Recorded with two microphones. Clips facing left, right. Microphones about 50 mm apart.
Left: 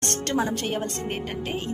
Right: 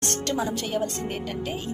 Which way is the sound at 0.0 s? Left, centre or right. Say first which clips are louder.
Left 1 dB; left.